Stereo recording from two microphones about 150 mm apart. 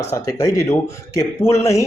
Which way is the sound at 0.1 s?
25° left (ahead or behind).